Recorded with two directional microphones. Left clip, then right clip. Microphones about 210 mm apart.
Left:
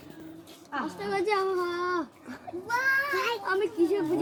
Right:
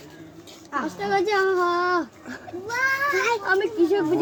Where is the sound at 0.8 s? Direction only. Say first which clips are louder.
Right 6 dB; 40° right (ahead or behind).